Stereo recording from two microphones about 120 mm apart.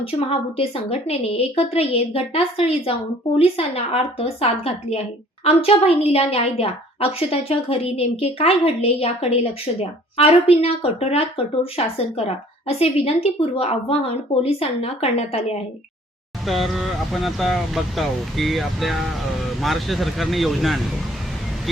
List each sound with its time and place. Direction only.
0.0 s a woman's voice: 55° left (ahead or behind)
16.5 s speech: centre (ahead or behind)